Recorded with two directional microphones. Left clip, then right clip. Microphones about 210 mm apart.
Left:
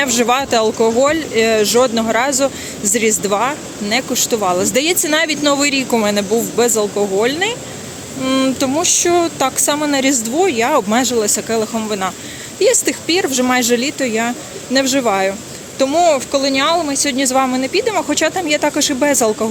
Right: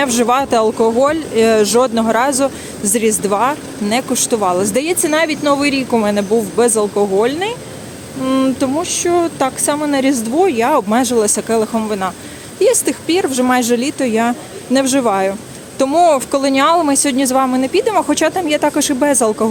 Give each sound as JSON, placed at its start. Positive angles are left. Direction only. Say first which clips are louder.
{"t": 0.0, "sound": "speech", "louder": "right 1 dB", "side_deg": -15}
{"t": 17.2, "sound": "speech", "louder": "right 1 dB", "side_deg": -15}